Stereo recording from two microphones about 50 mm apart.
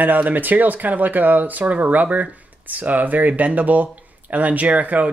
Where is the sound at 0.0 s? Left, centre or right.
Right.